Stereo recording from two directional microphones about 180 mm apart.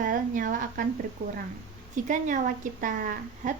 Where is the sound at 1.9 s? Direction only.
45° right (ahead or behind).